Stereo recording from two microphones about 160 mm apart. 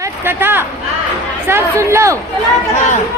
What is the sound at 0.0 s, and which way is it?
A woman's voice, 15° right (ahead or behind).